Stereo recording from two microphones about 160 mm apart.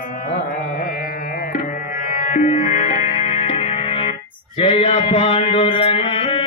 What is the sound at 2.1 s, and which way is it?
Music, 50° left (ahead or behind).